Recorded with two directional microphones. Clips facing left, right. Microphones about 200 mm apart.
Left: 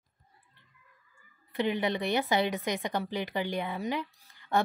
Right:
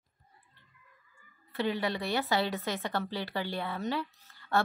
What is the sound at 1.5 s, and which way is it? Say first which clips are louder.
Speech: left 2 dB; 15° left (ahead or behind).